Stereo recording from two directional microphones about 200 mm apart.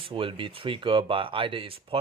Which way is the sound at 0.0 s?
25° right (ahead or behind).